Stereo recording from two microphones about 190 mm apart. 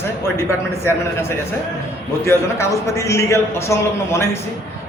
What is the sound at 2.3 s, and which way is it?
A man's voice, 15° left (ahead or behind).